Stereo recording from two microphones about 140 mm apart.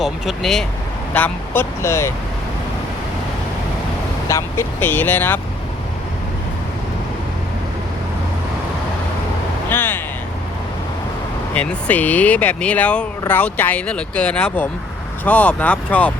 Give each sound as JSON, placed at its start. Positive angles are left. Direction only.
{"t": 0.0, "sound": "speech", "side_deg": 0}
{"t": 1.1, "sound": "speech", "side_deg": 15}
{"t": 4.3, "sound": "speech", "side_deg": 20}
{"t": 9.6, "sound": "vehicle", "side_deg": 15}
{"t": 11.5, "sound": "speech", "side_deg": 10}